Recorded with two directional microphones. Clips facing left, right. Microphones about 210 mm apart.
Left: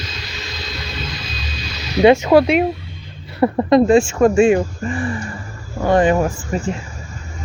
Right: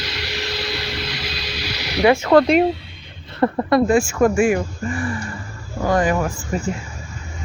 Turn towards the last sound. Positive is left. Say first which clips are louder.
# left 3 dB
turn(degrees=30)  # may be behind; listen again after turning